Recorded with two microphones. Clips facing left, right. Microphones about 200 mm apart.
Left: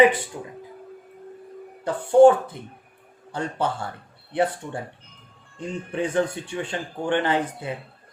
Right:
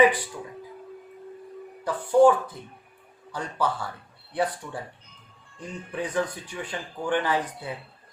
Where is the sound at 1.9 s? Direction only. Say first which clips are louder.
Left 4 dB; 25° left (ahead or behind).